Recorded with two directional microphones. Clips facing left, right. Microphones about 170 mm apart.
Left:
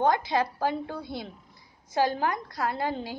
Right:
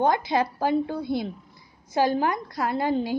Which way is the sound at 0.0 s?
15° right (ahead or behind).